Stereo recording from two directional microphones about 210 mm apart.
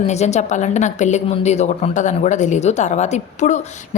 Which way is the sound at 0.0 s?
30° left (ahead or behind).